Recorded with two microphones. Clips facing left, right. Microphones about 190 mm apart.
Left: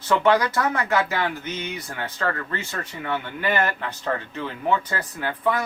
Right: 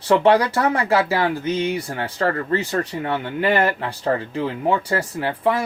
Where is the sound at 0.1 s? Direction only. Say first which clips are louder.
Right 4 dB; 30° right (ahead or behind).